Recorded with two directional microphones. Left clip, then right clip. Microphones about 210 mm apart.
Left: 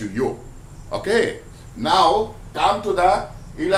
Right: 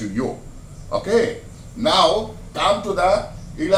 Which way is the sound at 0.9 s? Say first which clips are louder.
Right 1 dB; 35° left (ahead or behind).